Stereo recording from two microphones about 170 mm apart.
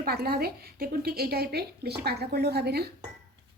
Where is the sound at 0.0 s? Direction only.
65° right (ahead or behind).